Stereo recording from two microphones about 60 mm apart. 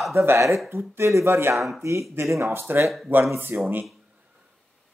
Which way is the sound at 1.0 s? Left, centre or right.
Right.